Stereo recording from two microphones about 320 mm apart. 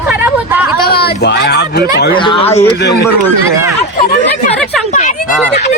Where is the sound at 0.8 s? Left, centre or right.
Left.